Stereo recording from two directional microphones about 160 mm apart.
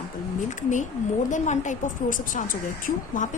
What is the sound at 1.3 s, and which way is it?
Speech, 50° left (ahead or behind).